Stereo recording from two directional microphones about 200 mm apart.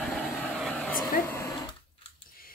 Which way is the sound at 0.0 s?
5° left (ahead or behind).